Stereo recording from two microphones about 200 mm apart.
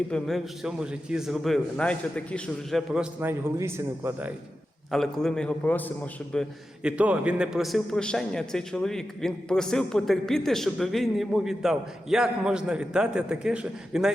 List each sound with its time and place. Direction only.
0.1 s a man's voice: centre (ahead or behind)
4.9 s a man's voice: centre (ahead or behind)